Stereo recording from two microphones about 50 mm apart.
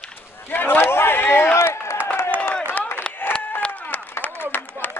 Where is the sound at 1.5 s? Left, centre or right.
Left.